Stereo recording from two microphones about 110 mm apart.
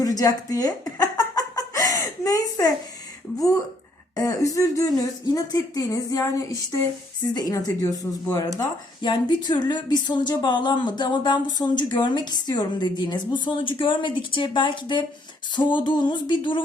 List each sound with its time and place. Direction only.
0.0 s a sound: 35° left (ahead or behind)
4.1 s speech: 30° left (ahead or behind)
9.0 s speech: 45° left (ahead or behind)